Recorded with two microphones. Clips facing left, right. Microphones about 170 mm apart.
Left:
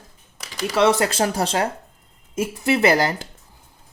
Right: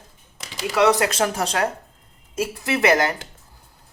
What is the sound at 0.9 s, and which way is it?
Speech, 30° left (ahead or behind).